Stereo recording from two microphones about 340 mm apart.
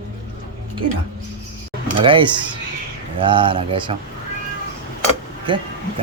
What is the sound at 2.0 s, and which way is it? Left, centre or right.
Speech, centre.